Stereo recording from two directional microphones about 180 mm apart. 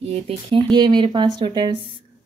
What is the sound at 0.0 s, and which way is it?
A woman's voice, 35° right (ahead or behind).